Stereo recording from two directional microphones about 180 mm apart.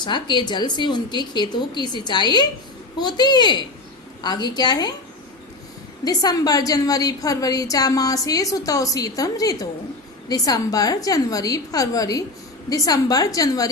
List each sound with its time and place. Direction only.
0.0 s a woman's voice: 25° left (ahead or behind)
6.1 s a woman's voice: 20° left (ahead or behind)